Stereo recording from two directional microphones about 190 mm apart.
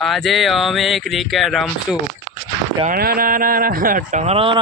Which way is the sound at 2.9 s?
50° right (ahead or behind).